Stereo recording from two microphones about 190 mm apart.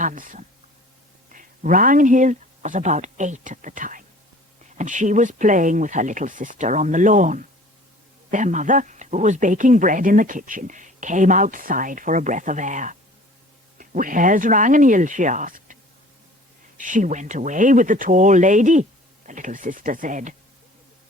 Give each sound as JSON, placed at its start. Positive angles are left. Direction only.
{"t": 0.0, "sound": "speech", "side_deg": -40}